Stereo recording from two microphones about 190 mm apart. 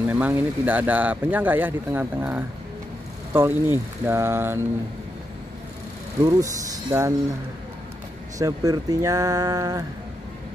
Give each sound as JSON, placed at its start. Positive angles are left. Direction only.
{"t": 0.1, "sound": "speech", "side_deg": -10}
{"t": 6.2, "sound": "speech", "side_deg": -20}
{"t": 8.4, "sound": "speech", "side_deg": -20}